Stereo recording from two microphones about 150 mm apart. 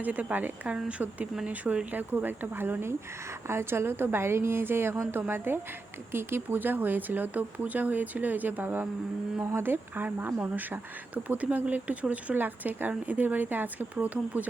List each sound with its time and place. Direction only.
0.0 s speech: 10° right (ahead or behind)